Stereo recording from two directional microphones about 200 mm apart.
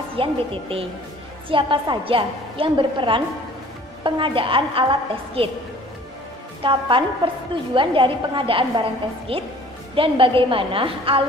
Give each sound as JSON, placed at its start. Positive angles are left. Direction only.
{"t": 0.1, "sound": "a woman's voice", "side_deg": -25}
{"t": 6.6, "sound": "a woman's voice", "side_deg": -25}